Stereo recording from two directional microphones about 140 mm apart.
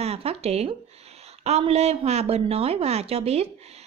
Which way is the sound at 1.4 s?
50° right (ahead or behind).